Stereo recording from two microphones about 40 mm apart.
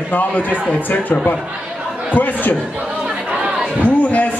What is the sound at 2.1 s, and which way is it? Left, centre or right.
Speech, left.